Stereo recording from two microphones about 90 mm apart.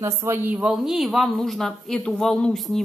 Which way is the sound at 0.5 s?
15° right (ahead or behind).